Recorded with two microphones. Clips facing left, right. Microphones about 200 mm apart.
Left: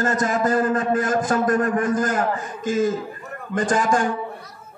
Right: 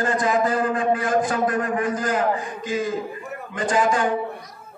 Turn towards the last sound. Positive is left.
turn(degrees=45)  # may be behind; listen again after turning